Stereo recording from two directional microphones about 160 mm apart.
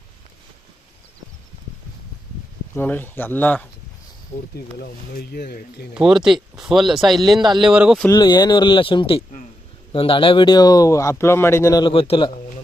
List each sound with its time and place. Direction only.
2.7 s speech: 10° left (ahead or behind)
4.5 s speech: 75° left (ahead or behind)
5.9 s speech: 5° right (ahead or behind)
8.1 s speech: 25° left (ahead or behind)
11.9 s speech: 35° left (ahead or behind)